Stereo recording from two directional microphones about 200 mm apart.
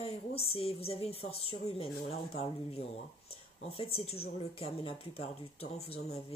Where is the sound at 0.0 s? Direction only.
30° left (ahead or behind).